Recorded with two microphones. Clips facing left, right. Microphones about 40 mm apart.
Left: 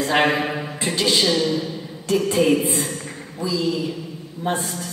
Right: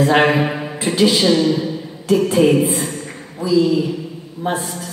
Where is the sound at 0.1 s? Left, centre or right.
Centre.